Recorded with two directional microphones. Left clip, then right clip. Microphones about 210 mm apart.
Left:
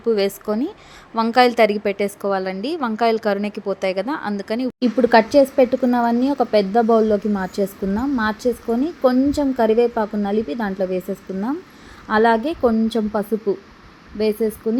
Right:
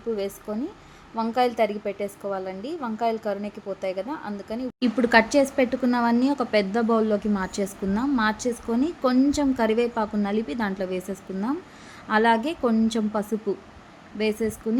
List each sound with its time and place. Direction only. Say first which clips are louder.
0.2 s a woman's voice: left 9 dB; 25° left (ahead or behind)